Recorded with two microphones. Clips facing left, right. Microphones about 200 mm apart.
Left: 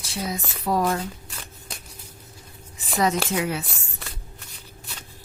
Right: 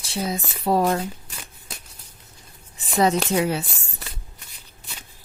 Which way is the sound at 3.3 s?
30° right (ahead or behind).